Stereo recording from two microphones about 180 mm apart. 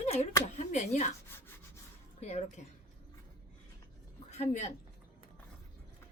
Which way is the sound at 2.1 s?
40° left (ahead or behind).